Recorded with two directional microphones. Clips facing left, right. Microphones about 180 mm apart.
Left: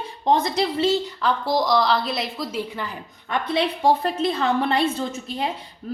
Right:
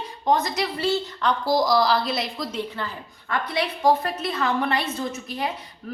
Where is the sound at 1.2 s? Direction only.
Centre (ahead or behind).